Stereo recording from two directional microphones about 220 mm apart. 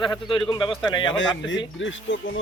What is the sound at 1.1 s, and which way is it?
Speech, 60° left (ahead or behind).